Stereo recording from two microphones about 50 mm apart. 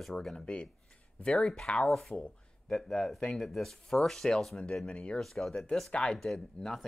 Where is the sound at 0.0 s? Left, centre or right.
Centre.